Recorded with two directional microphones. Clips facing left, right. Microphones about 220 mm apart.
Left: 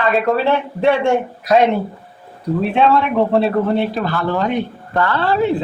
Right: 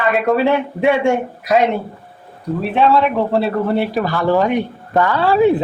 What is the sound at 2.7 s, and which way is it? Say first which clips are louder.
Speech: right 2 dB; centre (ahead or behind).